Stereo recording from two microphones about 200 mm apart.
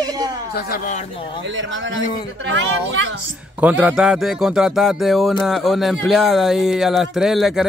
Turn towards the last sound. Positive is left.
turn(degrees=0)  # may be behind; listen again after turning